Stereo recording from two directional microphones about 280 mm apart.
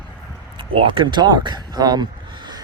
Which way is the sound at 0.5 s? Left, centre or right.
Centre.